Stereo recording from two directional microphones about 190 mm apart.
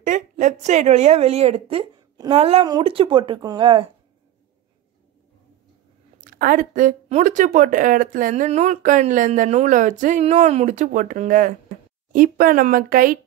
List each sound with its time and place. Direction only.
0.0 s a woman's voice: 40° right (ahead or behind)
6.3 s speech: 45° right (ahead or behind)